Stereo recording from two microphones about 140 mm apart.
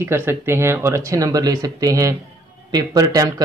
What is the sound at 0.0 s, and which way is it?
A man's voice, 15° right (ahead or behind).